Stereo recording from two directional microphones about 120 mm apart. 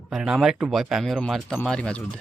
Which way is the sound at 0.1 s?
5° right (ahead or behind).